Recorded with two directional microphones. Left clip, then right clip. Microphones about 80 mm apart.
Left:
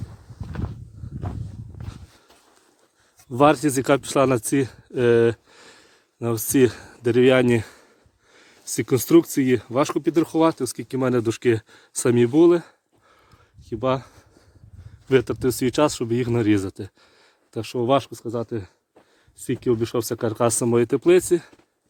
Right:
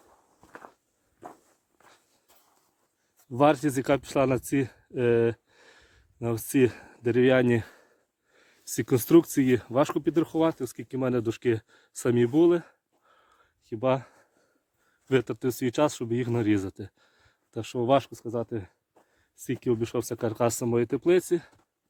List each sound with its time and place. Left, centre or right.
0.1 s clip-clop: right
3.2 s speech: right
4.4 s speech: right; by 5.7 s centre
5.7 s speech: right
8.3 s a sound: right
8.6 s speech: right
10.0 s speech: right
10.3 s speech: centre; by 13.2 s right
13.3 s a sound: right
15.0 s speech: right
17.7 s speech: right
18.3 s speech: right
20.7 s speech: centre; by 21.5 s right